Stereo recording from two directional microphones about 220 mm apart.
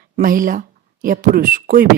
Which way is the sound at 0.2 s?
40° right (ahead or behind).